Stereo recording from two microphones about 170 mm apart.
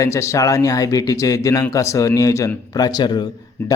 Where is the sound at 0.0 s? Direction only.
15° left (ahead or behind).